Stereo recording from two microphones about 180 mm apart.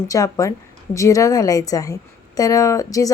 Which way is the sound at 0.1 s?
20° left (ahead or behind).